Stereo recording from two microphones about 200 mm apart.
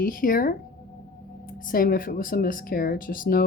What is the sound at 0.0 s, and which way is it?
Speech, 45° left (ahead or behind).